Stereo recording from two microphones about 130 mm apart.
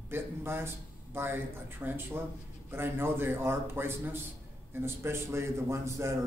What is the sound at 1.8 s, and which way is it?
A man's voice, 15° right (ahead or behind).